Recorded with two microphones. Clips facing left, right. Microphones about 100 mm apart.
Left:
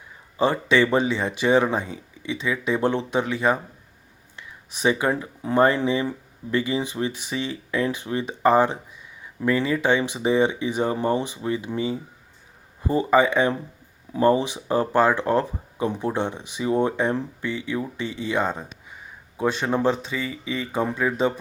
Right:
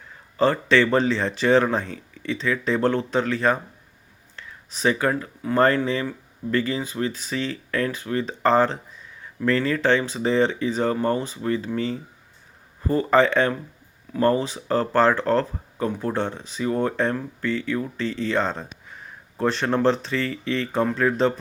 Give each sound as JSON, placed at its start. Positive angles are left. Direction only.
{"t": 0.3, "sound": "speech", "side_deg": 10}